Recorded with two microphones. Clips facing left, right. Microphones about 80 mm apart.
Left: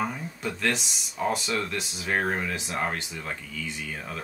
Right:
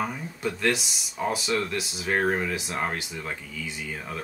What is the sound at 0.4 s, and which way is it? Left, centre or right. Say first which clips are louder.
Speech: right 3 dB; centre.